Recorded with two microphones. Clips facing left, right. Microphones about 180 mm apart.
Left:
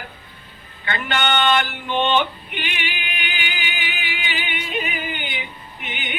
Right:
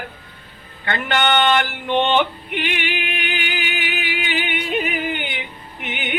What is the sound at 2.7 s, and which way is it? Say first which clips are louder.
Music: right 6 dB; 60° right (ahead or behind).